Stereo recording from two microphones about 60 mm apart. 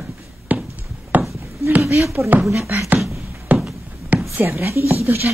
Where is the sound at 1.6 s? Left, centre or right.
Right.